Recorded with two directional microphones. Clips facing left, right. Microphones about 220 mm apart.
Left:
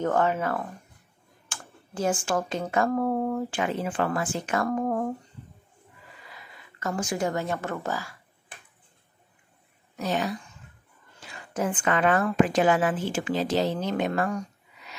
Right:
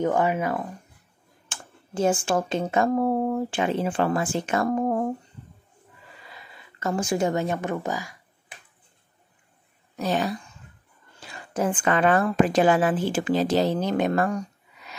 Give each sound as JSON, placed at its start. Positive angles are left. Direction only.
{"t": 0.0, "sound": "speech", "side_deg": -15}
{"t": 1.5, "sound": "a sound", "side_deg": -25}
{"t": 2.2, "sound": "speech", "side_deg": -25}
{"t": 6.3, "sound": "speech", "side_deg": -25}
{"t": 9.9, "sound": "a woman's voice", "side_deg": -35}